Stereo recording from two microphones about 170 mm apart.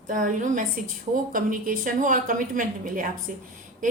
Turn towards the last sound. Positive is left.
turn(degrees=-50)  # may be behind; listen again after turning